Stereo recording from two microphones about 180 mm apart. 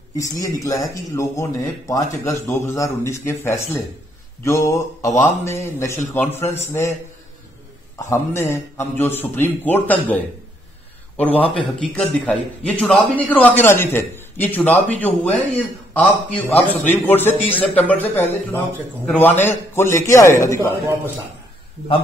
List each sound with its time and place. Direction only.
0.2 s a man's voice: 20° left (ahead or behind)
8.0 s a man's voice: 15° left (ahead or behind)